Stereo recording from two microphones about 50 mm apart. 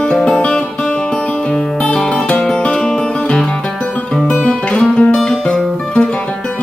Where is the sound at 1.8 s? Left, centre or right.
Left.